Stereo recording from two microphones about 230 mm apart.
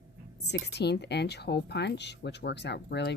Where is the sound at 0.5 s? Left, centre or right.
Left.